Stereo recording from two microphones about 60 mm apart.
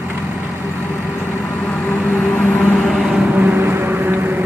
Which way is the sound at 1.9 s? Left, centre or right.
Left.